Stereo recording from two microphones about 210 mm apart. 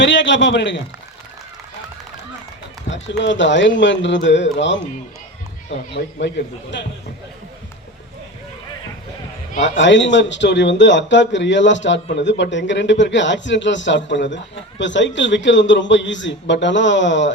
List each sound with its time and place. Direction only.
0.0 s a man's voice: 60° left (ahead or behind)
2.9 s a man's voice: 60° left (ahead or behind)
5.9 s a man's voice: 55° left (ahead or behind)
9.6 s a man's voice: 60° left (ahead or behind)